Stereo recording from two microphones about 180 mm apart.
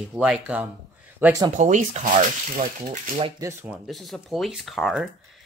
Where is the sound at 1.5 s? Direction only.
40° right (ahead or behind).